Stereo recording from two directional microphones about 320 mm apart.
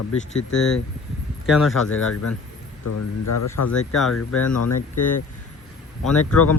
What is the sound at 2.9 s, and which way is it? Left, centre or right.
Speech, left.